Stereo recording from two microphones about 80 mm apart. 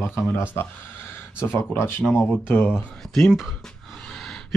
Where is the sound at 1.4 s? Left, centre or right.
Left.